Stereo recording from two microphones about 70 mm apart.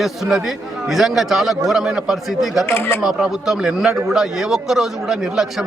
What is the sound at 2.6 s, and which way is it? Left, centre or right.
Speech, left.